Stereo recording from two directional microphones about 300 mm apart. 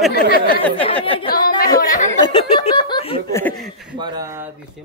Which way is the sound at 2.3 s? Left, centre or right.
Centre.